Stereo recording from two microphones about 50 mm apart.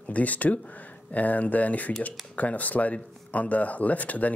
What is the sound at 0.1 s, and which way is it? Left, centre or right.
Speech, left.